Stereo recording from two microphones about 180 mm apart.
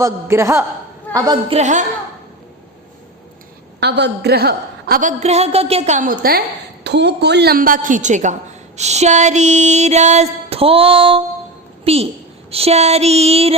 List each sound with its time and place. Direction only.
0.0 s a man's voice: 15° right (ahead or behind)
1.5 s a woman's voice: 40° right (ahead or behind)
3.8 s a woman's voice: 70° right (ahead or behind); by 6.1 s 45° right (ahead or behind)
6.8 s a woman's voice: 70° right (ahead or behind); by 13.5 s 35° right (ahead or behind)